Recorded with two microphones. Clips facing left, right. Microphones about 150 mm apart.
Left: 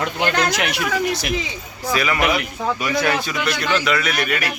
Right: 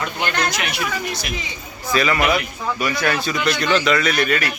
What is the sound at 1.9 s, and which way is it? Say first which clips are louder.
A man's voice: right 1 dB; 10° left (ahead or behind).